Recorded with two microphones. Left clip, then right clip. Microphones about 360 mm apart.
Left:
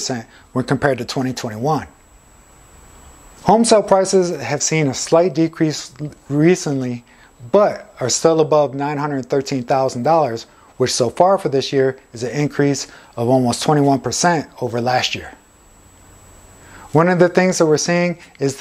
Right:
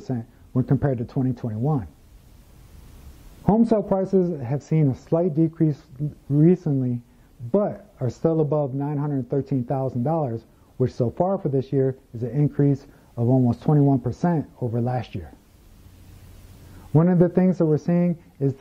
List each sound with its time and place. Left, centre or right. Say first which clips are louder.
0.0 s speech: left 8 dB; centre
3.4 s speech: left 9 dB; centre
16.9 s speech: left 8 dB; centre